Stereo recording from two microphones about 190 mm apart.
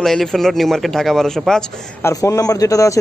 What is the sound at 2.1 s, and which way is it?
Speech, 15° left (ahead or behind).